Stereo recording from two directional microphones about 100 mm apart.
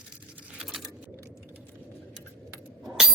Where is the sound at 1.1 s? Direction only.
25° right (ahead or behind).